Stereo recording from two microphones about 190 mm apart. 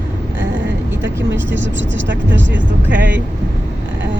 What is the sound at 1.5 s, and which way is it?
Speech, 75° right (ahead or behind).